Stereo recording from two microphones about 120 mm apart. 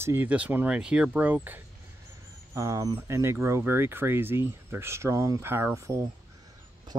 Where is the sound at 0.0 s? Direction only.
20° right (ahead or behind).